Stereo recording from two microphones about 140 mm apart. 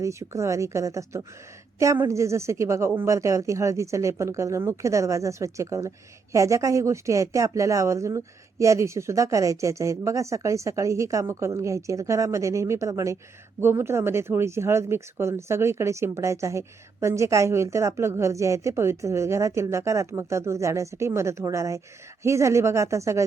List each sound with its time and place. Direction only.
0.0 s speech: 20° right (ahead or behind)